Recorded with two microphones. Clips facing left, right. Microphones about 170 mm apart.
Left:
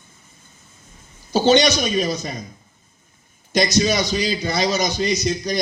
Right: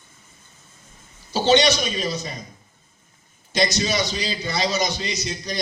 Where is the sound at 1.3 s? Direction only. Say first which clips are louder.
Left 2 dB; 45° left (ahead or behind).